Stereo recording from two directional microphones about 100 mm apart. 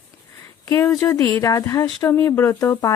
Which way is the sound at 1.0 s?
30° left (ahead or behind).